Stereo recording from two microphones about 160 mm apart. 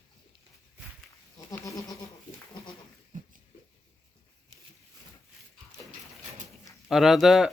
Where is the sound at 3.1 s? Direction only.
55° right (ahead or behind).